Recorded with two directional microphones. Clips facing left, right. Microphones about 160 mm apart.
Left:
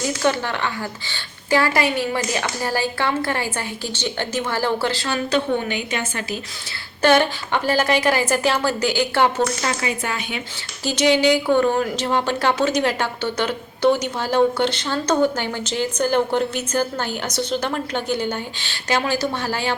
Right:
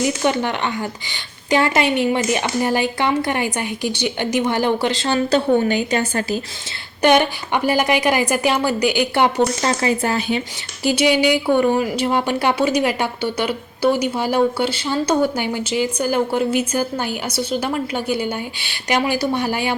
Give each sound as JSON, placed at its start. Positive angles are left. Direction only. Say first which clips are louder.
{"t": 0.2, "sound": "speech", "louder": "right 2 dB", "side_deg": -20}
{"t": 7.0, "sound": "a woman's voice", "louder": "right 1 dB", "side_deg": -15}
{"t": 9.6, "sound": "speech", "louder": "right 5 dB", "side_deg": -30}
{"t": 10.8, "sound": "a woman's voice", "louder": "right 1 dB", "side_deg": -10}